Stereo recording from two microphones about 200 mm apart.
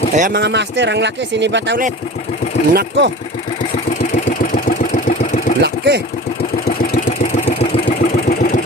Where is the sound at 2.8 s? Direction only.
60° right (ahead or behind).